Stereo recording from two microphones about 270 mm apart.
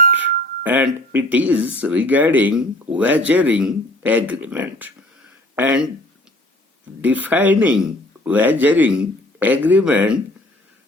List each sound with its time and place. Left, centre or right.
0.0 s music: right
0.6 s speech: centre
7.0 s speech: centre